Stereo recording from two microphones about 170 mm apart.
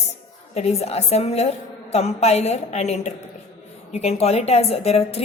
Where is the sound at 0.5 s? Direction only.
40° left (ahead or behind).